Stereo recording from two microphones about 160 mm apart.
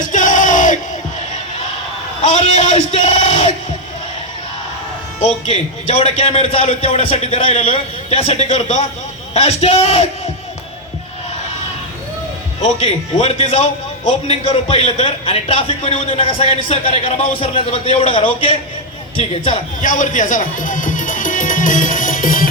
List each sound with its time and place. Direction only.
0.0 s battle cry: 55° left (ahead or behind)
2.2 s a man's voice: 35° left (ahead or behind)
3.0 s a sound: 45° left (ahead or behind)
5.2 s a man's voice: 40° left (ahead or behind)
12.6 s a man's voice: 40° left (ahead or behind)
19.3 s speech: 50° left (ahead or behind)